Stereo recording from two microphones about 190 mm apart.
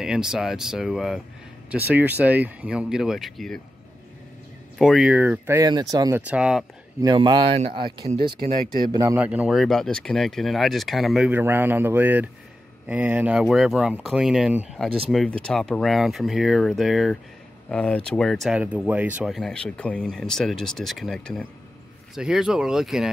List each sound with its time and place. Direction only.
0.0 s speech: 5° right (ahead or behind)
4.7 s speech: centre (ahead or behind); by 6.2 s 20° right (ahead or behind)
6.2 s speech: 5° right (ahead or behind)
7.0 s speech: 20° right (ahead or behind); by 23.0 s 5° right (ahead or behind)